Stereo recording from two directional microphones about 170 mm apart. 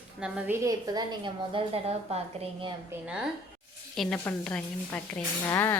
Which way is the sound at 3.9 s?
5° left (ahead or behind).